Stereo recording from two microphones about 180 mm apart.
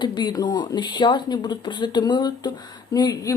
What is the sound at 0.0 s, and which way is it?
Speech, 25° left (ahead or behind).